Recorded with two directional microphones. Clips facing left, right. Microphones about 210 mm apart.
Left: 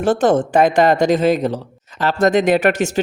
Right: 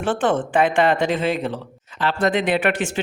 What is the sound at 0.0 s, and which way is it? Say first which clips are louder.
Speech: left 6 dB; 40° left (ahead or behind).